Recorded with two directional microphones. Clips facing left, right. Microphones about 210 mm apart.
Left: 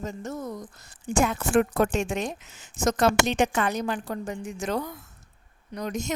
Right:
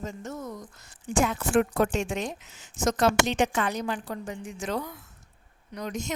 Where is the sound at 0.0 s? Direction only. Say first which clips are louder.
Left 3 dB; 35° left (ahead or behind).